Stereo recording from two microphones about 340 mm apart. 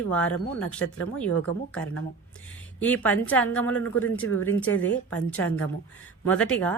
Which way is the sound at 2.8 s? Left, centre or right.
Centre.